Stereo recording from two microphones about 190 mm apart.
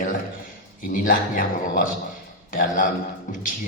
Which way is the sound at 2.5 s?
45° left (ahead or behind).